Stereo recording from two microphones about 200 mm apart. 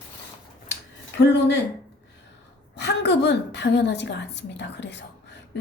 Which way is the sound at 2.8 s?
60° left (ahead or behind).